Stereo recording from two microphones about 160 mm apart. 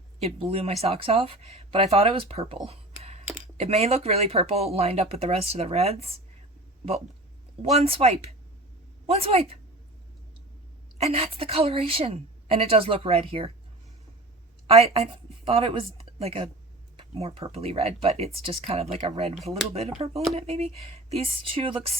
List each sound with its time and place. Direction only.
0.2 s a woman's voice: 40° right (ahead or behind)
2.6 s a sound: 40° right (ahead or behind)
3.6 s a woman's voice: 40° right (ahead or behind)
7.6 s a woman's voice: 40° right (ahead or behind)
10.9 s a woman's voice: 40° right (ahead or behind)
14.7 s a woman's voice: 40° right (ahead or behind)
19.4 s speech: centre (ahead or behind)
20.0 s a woman's voice: 35° right (ahead or behind)